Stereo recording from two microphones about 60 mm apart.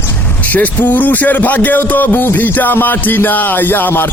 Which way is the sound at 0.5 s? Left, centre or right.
Left.